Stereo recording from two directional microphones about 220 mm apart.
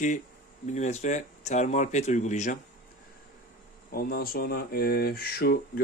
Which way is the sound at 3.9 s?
40° left (ahead or behind).